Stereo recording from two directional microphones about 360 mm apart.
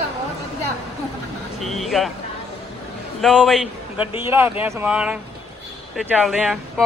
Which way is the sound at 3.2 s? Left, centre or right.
Centre.